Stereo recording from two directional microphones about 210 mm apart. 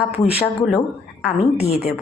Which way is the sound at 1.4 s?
30° left (ahead or behind).